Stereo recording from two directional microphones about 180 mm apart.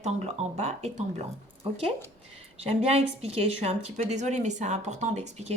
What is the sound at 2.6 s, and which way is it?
Speech, 35° right (ahead or behind).